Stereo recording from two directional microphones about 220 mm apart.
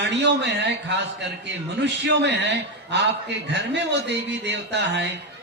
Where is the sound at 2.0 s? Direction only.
50° right (ahead or behind).